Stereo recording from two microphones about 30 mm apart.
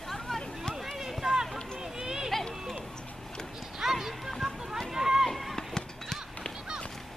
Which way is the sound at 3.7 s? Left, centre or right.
Centre.